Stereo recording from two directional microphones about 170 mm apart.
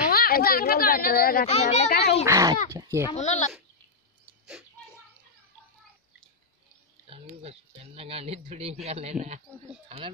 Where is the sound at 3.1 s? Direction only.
45° left (ahead or behind).